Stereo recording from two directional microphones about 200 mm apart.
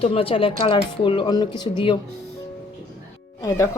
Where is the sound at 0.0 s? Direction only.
30° left (ahead or behind).